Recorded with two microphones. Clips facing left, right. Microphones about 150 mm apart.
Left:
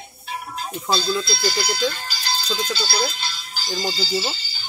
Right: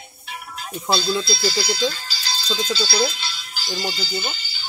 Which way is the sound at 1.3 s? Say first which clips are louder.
Right 1 dB; 50° left (ahead or behind).